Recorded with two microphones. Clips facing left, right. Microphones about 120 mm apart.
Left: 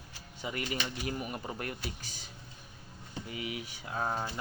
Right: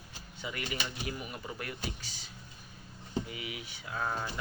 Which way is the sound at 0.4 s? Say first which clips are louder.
Left 2 dB; 35° left (ahead or behind).